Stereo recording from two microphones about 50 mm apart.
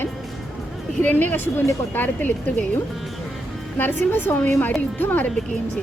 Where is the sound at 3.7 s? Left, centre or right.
Left.